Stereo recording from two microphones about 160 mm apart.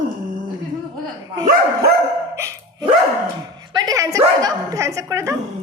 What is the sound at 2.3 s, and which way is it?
Dog, 15° right (ahead or behind).